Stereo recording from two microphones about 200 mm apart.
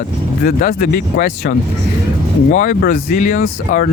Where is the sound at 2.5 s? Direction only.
40° left (ahead or behind).